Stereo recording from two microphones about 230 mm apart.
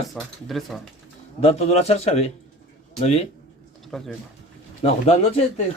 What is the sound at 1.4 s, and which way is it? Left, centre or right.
Speech, left.